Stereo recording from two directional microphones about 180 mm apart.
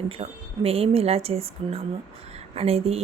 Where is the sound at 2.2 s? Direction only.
35° right (ahead or behind).